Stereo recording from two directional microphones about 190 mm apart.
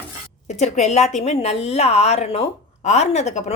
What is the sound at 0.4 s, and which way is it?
A woman's voice, 35° left (ahead or behind).